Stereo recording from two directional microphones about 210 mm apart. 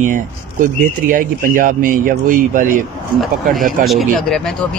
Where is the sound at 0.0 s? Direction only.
40° right (ahead or behind).